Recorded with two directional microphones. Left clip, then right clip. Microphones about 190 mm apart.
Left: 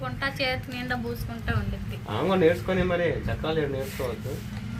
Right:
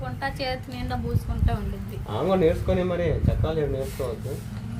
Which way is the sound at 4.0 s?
15° left (ahead or behind).